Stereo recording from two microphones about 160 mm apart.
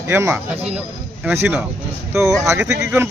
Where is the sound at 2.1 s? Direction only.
5° right (ahead or behind).